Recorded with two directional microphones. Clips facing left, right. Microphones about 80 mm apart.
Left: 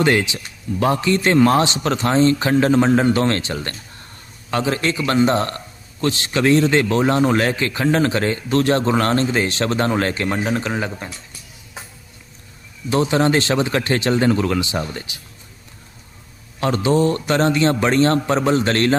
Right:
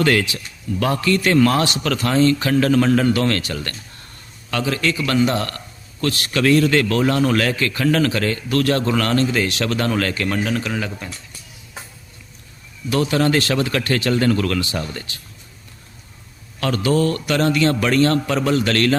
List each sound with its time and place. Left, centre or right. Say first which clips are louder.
0.0 s a man's voice: left 1 dB; left
12.9 s a man's voice: left 1 dB; left
16.6 s a man's voice: left 1 dB; left